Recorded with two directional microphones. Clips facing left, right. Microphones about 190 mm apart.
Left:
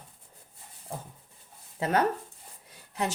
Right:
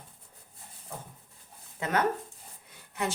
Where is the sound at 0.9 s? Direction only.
30° left (ahead or behind).